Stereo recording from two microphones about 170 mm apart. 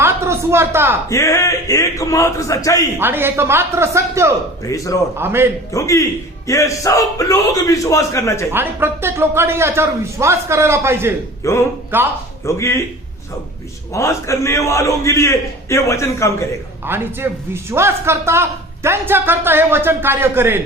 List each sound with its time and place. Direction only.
0.0 s a sound: 15° right (ahead or behind)
1.1 s a man's voice: 15° left (ahead or behind)
3.0 s speech: 15° right (ahead or behind)
4.6 s speech: 20° left (ahead or behind)
5.1 s speech: 15° right (ahead or behind)
5.7 s a man's voice: 20° left (ahead or behind)
8.5 s speech: 10° right (ahead or behind)
11.4 s a man's voice: 15° left (ahead or behind)
11.9 s speech: 10° right (ahead or behind)
12.5 s a man's voice: 15° left (ahead or behind)
13.9 s a man's voice: 15° left (ahead or behind)
16.8 s speech: 15° right (ahead or behind)